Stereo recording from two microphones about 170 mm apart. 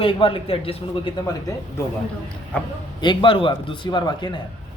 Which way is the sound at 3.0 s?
30° left (ahead or behind).